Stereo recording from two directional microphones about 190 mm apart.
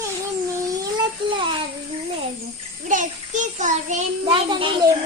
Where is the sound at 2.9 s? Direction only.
40° right (ahead or behind).